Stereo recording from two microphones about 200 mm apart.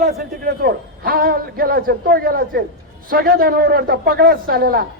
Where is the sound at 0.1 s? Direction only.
50° right (ahead or behind).